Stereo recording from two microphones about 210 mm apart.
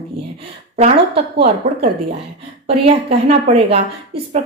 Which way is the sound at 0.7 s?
30° right (ahead or behind).